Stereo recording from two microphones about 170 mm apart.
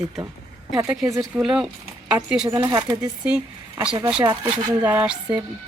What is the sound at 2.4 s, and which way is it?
Speech, 25° right (ahead or behind).